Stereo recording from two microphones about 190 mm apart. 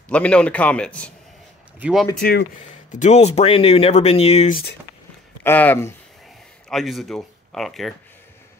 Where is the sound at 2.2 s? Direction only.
55° left (ahead or behind).